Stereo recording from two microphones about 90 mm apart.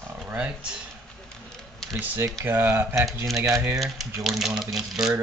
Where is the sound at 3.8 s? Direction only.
Centre (ahead or behind).